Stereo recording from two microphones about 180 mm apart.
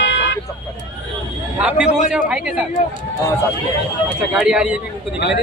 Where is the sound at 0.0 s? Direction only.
80° left.